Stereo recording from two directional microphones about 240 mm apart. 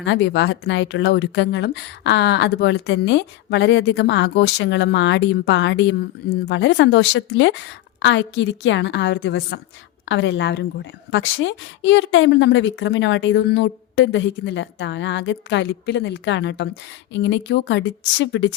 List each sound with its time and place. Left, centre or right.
0.0 s speech: left